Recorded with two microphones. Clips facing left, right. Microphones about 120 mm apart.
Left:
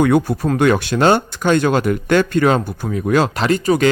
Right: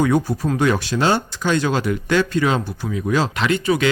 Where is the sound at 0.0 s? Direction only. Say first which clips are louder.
Left 4 dB; 60° left (ahead or behind).